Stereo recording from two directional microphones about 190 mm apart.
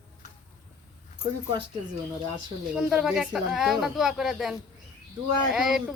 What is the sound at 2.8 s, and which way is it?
Speech, 5° right (ahead or behind).